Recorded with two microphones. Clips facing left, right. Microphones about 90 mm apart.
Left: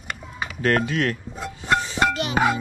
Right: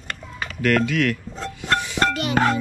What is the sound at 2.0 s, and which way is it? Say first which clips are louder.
Music: right 1 dB; 15° right (ahead or behind).